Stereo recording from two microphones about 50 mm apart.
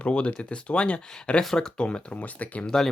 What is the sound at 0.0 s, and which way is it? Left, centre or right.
Speech, left.